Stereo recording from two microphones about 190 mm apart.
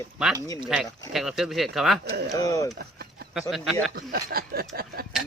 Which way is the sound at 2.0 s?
60° right (ahead or behind).